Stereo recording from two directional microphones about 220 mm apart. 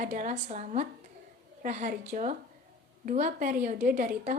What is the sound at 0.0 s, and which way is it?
A woman's voice, 35° right (ahead or behind).